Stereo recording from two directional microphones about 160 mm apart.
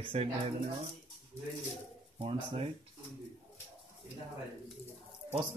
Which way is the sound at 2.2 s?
40° right (ahead or behind).